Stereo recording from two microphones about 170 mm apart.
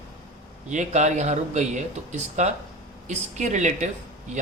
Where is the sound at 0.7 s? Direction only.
45° right (ahead or behind).